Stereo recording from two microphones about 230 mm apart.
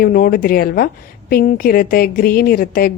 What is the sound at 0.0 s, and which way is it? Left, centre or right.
A woman's voice, left.